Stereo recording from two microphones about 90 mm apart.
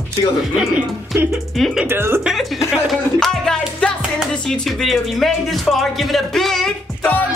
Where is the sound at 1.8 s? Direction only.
25° right (ahead or behind).